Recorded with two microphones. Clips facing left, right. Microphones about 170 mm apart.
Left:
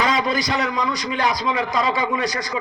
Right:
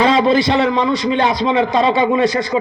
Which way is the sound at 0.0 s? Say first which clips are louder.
Right 8 dB; 30° right (ahead or behind).